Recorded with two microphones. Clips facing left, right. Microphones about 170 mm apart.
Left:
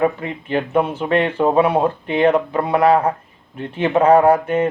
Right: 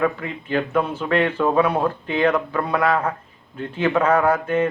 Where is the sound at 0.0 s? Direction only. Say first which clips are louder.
Left 3 dB; 20° left (ahead or behind).